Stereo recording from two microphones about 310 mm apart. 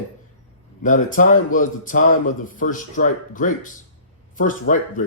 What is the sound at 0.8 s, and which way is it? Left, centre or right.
Speech, left.